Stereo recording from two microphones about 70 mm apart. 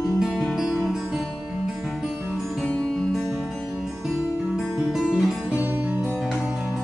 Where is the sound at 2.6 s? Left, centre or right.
Centre.